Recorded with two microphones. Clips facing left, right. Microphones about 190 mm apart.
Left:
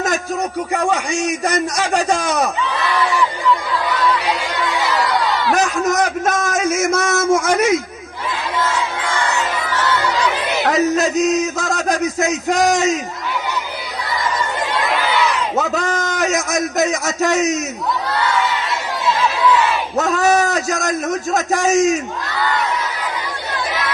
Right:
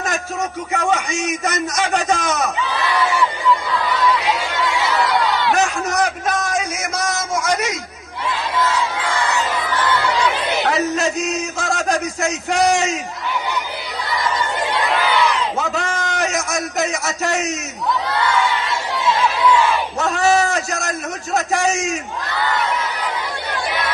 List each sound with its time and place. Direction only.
0.7 s a man's voice: 35° left (ahead or behind)
4.3 s chatter: centre (ahead or behind)
5.5 s a sound: 40° left (ahead or behind)
11.5 s a man's voice: 40° left (ahead or behind)
15.5 s a man's voice: 40° left (ahead or behind)
20.0 s a man's voice: 40° left (ahead or behind)